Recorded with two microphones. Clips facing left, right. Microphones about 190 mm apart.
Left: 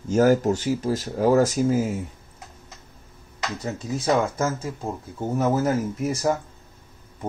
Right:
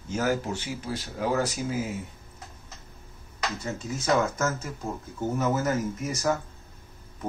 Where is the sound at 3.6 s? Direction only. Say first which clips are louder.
Left 4 dB; 35° left (ahead or behind).